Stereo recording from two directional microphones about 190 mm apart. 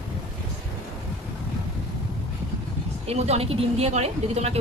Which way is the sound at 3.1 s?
30° right (ahead or behind).